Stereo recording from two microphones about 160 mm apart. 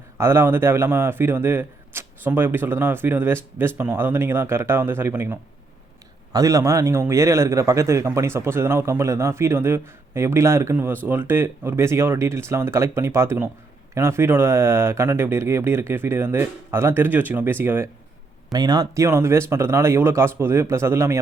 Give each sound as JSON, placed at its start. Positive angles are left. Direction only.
{"t": 0.2, "sound": "a man's voice", "side_deg": -15}
{"t": 18.5, "sound": "a man's voice", "side_deg": -25}